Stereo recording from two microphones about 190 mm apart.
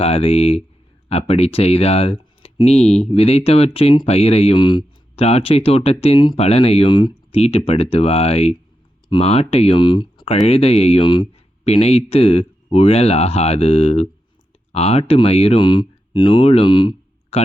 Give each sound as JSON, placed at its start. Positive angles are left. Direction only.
{"t": 0.0, "sound": "speech", "side_deg": 30}